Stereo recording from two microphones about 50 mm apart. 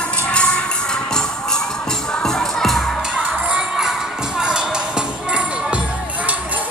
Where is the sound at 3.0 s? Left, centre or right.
Centre.